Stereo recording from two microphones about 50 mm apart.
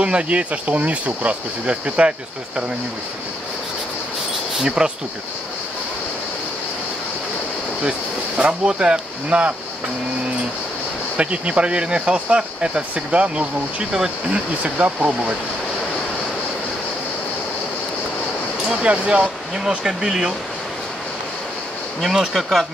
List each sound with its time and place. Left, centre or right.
0.0 s speech: right
4.6 s speech: centre
8.4 s speech: right
11.1 s speech: right
18.7 s speech: centre
19.8 s speech: centre
22.0 s speech: centre